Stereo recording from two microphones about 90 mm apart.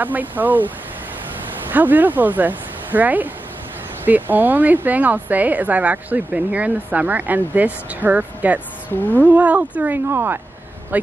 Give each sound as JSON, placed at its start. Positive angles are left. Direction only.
{"t": 0.0, "sound": "a woman's voice", "side_deg": -20}
{"t": 1.7, "sound": "a woman's voice", "side_deg": -20}